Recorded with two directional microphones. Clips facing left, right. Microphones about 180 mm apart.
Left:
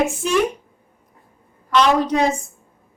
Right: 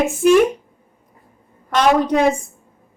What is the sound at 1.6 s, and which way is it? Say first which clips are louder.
Speech: right 1 dB; 50° right (ahead or behind).